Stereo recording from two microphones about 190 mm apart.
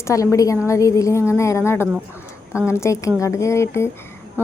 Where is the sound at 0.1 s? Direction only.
15° left (ahead or behind).